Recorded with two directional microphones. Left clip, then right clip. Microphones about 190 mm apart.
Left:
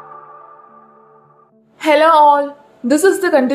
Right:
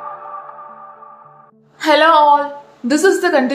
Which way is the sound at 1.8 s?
30° left (ahead or behind).